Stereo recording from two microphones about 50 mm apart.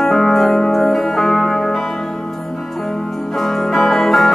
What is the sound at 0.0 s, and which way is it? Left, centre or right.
Music, centre.